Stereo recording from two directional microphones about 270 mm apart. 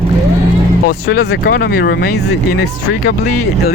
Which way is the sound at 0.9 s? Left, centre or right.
Left.